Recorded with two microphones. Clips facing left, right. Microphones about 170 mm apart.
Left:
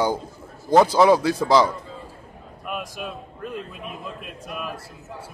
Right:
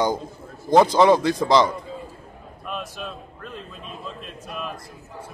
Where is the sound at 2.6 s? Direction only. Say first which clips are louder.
Left 1 dB; 10° left (ahead or behind).